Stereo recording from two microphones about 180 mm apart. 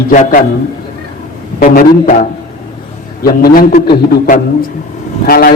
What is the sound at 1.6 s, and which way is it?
A man's voice, 50° left (ahead or behind).